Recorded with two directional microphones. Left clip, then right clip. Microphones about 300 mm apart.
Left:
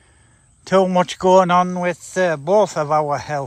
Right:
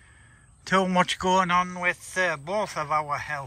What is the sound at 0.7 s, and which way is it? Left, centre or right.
Speech, centre.